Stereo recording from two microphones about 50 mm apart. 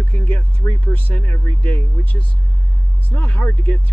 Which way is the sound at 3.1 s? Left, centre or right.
Left.